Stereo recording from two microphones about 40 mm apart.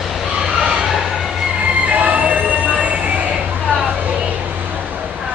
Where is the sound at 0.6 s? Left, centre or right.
Centre.